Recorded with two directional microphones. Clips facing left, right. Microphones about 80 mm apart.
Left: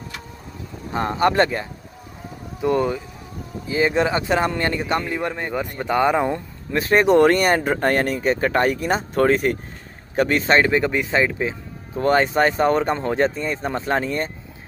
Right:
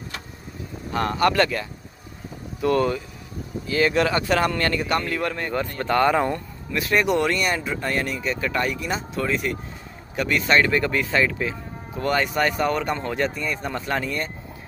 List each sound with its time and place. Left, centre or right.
0.9 s speech: left
2.6 s speech: centre
6.7 s speech: left